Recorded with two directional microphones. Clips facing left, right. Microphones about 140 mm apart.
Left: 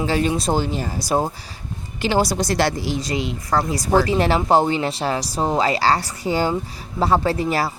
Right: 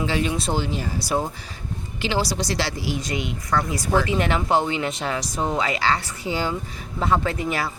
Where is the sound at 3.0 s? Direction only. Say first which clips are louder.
Left 3 dB; 35° left (ahead or behind).